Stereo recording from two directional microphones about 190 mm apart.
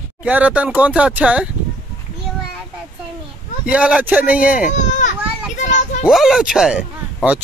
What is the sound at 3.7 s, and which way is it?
Speech, 5° right (ahead or behind).